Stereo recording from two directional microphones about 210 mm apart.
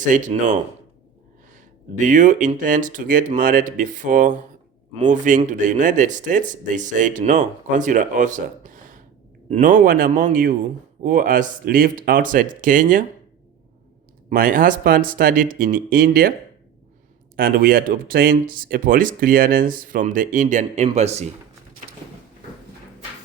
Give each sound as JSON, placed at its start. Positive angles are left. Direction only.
{"t": 0.0, "sound": "speech", "side_deg": -35}
{"t": 2.0, "sound": "speech", "side_deg": -35}
{"t": 14.3, "sound": "speech", "side_deg": -40}
{"t": 17.3, "sound": "speech", "side_deg": -45}